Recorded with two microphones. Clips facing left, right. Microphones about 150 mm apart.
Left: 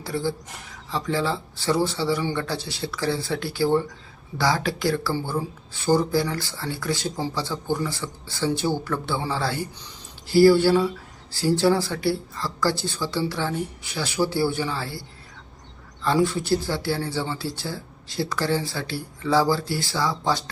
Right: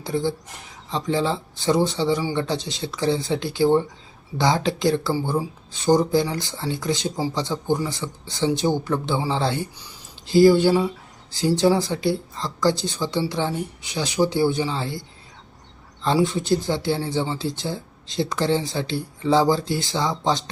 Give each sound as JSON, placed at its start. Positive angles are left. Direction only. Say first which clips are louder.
{"t": 0.0, "sound": "speech", "louder": "right 3 dB", "side_deg": -20}
{"t": 16.0, "sound": "speech", "louder": "right 1 dB", "side_deg": -20}